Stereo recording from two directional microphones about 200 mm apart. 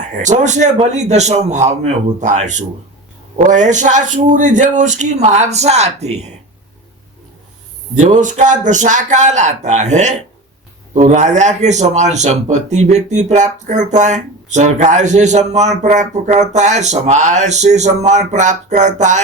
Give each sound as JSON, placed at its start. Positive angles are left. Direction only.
{"t": 0.0, "sound": "speech", "side_deg": -40}
{"t": 7.9, "sound": "speech", "side_deg": -40}